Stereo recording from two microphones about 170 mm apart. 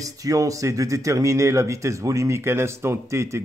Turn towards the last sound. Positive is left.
turn(degrees=-15)  # may be behind; listen again after turning